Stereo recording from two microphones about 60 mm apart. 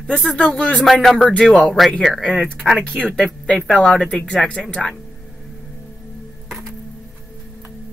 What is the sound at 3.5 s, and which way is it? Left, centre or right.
Speech, centre.